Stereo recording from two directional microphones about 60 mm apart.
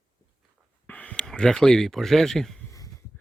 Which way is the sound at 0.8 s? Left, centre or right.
Left.